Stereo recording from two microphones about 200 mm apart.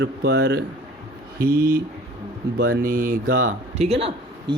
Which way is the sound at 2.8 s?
45° right (ahead or behind).